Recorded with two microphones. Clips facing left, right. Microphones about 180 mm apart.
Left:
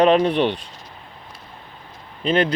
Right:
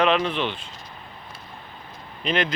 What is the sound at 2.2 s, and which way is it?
Speech, 30° left (ahead or behind).